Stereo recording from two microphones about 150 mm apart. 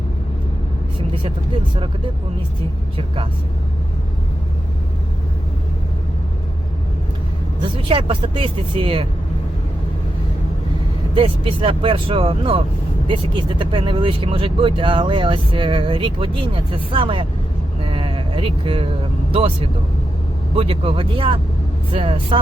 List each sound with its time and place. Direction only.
0.9 s vehicle: 35° right (ahead or behind)
7.6 s speech: 35° right (ahead or behind)
11.1 s speech: 35° right (ahead or behind)
17.8 s vehicle: 40° right (ahead or behind)
19.3 s speech: 40° right (ahead or behind)